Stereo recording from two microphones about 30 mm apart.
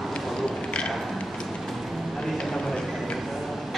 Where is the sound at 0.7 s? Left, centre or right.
Left.